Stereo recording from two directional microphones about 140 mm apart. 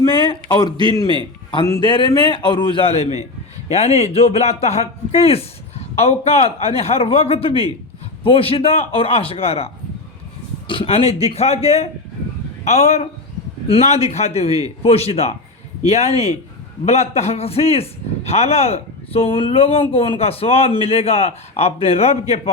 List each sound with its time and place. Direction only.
0.0 s a man's voice: 35° left (ahead or behind)
2.9 s speech: 50° left (ahead or behind)